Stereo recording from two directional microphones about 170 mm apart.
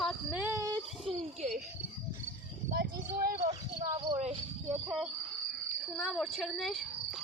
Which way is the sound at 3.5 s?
25° right (ahead or behind).